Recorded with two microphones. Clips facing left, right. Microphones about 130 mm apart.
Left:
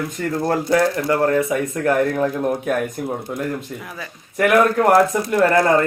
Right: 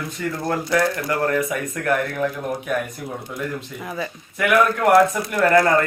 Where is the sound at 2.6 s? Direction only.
45° left (ahead or behind).